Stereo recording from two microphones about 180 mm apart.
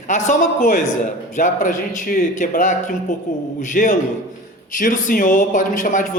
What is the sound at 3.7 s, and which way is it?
A man's voice, 45° left (ahead or behind).